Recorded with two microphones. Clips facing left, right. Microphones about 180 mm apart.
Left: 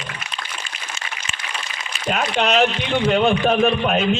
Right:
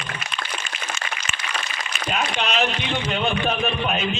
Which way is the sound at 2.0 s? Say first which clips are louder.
Left 5 dB; 45° left (ahead or behind).